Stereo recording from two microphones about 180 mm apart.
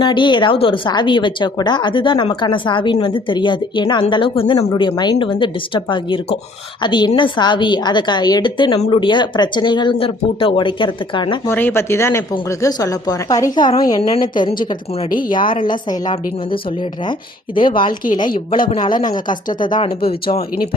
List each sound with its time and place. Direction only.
0.0 s speech: 25° left (ahead or behind)
11.4 s speech: 10° left (ahead or behind); by 19.9 s 25° left (ahead or behind)